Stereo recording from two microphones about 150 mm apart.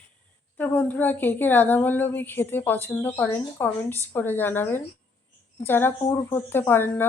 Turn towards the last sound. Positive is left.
turn(degrees=15)  # may be behind; listen again after turning